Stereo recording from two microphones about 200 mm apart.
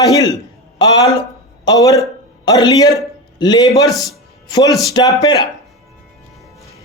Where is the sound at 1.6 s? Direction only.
15° left (ahead or behind).